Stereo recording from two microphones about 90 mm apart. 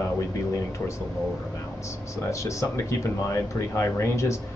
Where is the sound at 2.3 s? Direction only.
35° left (ahead or behind).